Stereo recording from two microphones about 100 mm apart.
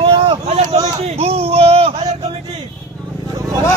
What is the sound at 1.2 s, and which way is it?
Speech, 90° right.